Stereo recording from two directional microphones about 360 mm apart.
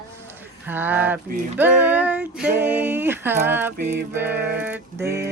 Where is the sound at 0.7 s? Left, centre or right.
Centre.